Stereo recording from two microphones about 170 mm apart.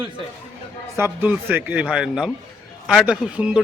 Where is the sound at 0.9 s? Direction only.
10° right (ahead or behind).